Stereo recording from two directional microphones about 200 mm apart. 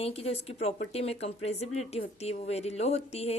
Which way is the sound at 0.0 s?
30° left (ahead or behind).